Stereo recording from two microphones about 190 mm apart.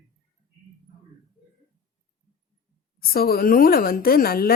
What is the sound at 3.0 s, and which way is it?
A woman's voice, 50° left (ahead or behind).